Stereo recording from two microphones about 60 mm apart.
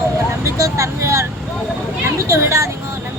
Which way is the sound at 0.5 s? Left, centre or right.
Right.